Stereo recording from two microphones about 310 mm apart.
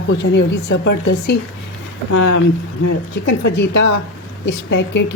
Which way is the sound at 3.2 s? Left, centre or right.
Left.